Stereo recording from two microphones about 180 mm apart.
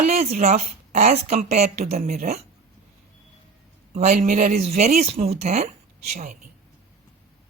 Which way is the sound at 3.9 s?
40° right (ahead or behind).